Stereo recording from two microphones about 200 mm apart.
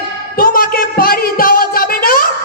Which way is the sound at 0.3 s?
45° left (ahead or behind).